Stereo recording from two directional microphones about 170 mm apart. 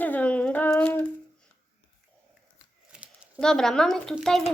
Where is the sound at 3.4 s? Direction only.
5° left (ahead or behind).